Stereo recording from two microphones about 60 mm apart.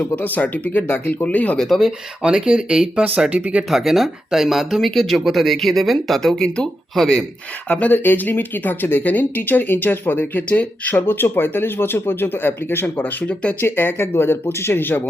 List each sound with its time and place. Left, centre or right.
0.2 s speech: left
1.5 s speech: centre
2.2 s speech: centre
3.7 s speech: centre
7.7 s speech: left
11.0 s speech: left
13.2 s speech: left
13.6 s speech: left